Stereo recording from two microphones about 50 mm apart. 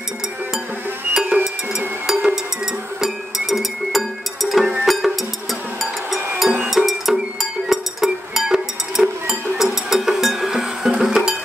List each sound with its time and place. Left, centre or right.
1.3 s music: centre